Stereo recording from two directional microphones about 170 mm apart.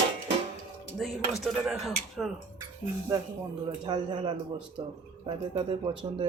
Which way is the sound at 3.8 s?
25° right (ahead or behind).